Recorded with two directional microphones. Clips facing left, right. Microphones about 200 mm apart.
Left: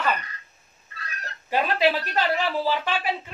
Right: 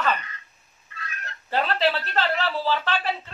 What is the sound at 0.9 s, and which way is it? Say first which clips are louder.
Fowl: even; 35° left (ahead or behind).